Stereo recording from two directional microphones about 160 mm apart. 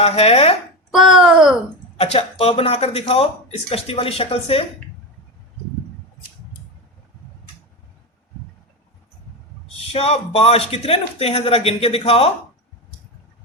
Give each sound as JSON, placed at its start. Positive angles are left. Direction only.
{"t": 0.0, "sound": "speech", "side_deg": 40}
{"t": 0.9, "sound": "speech", "side_deg": -5}
{"t": 2.0, "sound": "speech", "side_deg": 40}
{"t": 9.9, "sound": "speech", "side_deg": 40}